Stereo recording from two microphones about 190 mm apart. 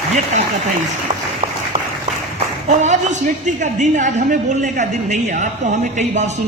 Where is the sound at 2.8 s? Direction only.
40° right (ahead or behind).